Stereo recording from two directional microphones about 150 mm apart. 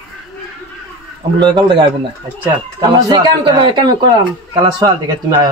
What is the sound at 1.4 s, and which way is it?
A man's voice, 30° right (ahead or behind).